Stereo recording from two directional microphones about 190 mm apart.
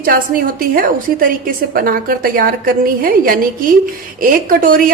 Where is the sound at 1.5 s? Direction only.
50° right (ahead or behind).